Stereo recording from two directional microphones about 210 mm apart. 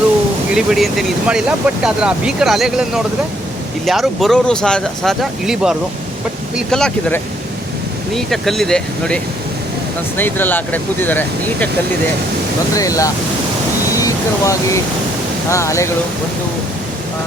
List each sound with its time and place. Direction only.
0.5 s speech: centre (ahead or behind)
12.7 s speech: 15° left (ahead or behind)